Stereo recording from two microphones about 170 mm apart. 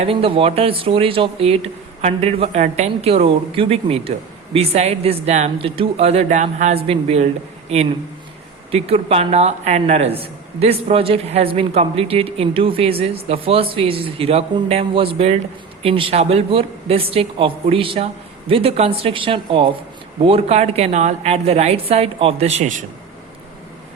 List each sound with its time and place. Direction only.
0.0 s a woman's voice: 35° right (ahead or behind)
8.7 s a woman's voice: 35° right (ahead or behind)